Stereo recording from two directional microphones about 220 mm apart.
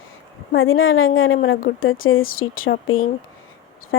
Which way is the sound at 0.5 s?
65° left (ahead or behind).